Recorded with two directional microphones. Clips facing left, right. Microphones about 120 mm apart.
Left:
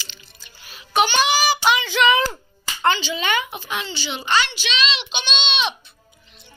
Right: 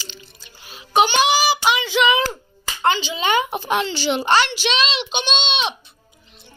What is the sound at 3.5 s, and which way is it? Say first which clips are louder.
A child's voice: right 8 dB; 55° right (ahead or behind).